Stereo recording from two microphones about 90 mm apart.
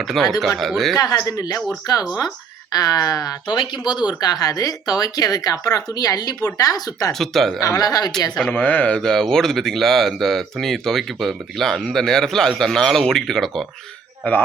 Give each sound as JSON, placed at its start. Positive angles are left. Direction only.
{"t": 0.0, "sound": "speech", "side_deg": 0}
{"t": 0.9, "sound": "speech", "side_deg": 45}
{"t": 3.4, "sound": "speech", "side_deg": 60}
{"t": 4.2, "sound": "speech", "side_deg": 45}
{"t": 7.1, "sound": "speech", "side_deg": 5}
{"t": 7.6, "sound": "speech", "side_deg": 45}
{"t": 8.4, "sound": "speech", "side_deg": 10}
{"t": 9.0, "sound": "speech", "side_deg": 5}